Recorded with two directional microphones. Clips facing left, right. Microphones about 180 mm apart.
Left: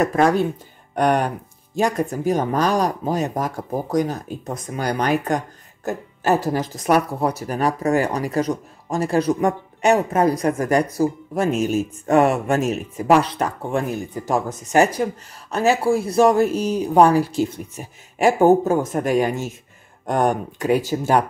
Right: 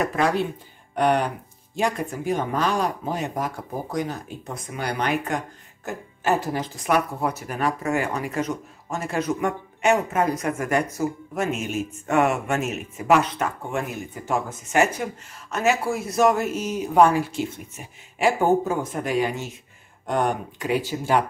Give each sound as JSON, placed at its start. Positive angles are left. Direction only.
{"t": 0.0, "sound": "speech", "side_deg": 45}